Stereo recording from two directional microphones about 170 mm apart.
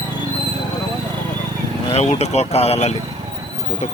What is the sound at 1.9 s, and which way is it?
Speech, 40° left (ahead or behind).